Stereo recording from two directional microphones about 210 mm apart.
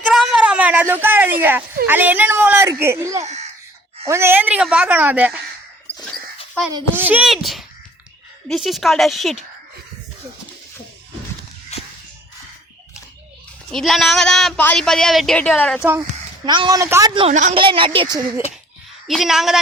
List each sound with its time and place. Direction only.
0.0 s a sound: centre (ahead or behind)
1.9 s speech: 10° right (ahead or behind)
6.7 s speech: 10° right (ahead or behind)
11.7 s a sound: 30° left (ahead or behind)
13.7 s speech: centre (ahead or behind)
15.8 s speech: 10° right (ahead or behind)
17.2 s a woman's voice: 35° right (ahead or behind)
19.0 s speech: centre (ahead or behind)